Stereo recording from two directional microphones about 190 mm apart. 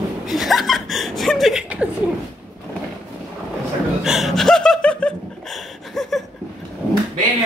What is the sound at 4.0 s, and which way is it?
Laughter, centre (ahead or behind).